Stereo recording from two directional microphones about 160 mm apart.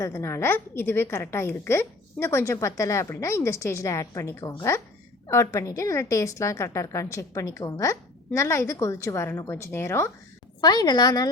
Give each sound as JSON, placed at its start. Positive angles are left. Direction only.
{"t": 0.0, "sound": "a woman's voice", "side_deg": 15}